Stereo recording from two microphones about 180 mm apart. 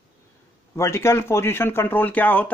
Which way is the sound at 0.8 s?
15° left (ahead or behind).